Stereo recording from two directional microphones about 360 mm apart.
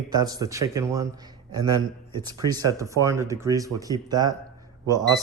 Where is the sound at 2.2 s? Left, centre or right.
Centre.